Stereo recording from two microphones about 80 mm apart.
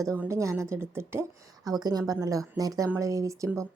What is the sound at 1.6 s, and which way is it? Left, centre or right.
Speech, right.